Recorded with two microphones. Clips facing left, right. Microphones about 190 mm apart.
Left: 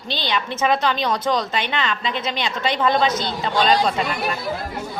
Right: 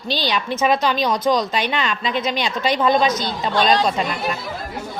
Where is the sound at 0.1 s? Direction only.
25° left (ahead or behind).